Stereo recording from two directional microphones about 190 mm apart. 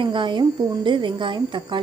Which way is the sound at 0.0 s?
25° right (ahead or behind).